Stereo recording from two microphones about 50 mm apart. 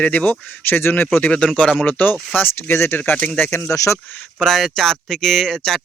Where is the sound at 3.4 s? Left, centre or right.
Left.